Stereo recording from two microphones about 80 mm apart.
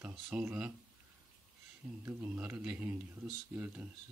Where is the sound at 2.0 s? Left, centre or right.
Right.